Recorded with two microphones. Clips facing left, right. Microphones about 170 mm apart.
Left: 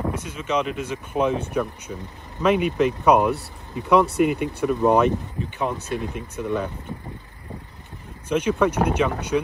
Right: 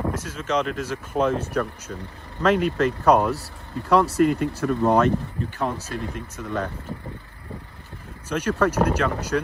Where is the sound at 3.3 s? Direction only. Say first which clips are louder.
Left 2 dB; 65° left (ahead or behind).